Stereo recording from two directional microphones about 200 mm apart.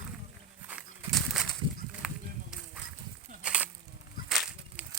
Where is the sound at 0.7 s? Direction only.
5° right (ahead or behind).